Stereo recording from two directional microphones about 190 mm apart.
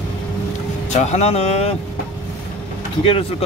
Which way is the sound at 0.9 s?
35° left (ahead or behind).